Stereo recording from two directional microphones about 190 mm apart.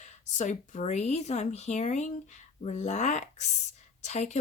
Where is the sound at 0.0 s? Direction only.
40° left (ahead or behind).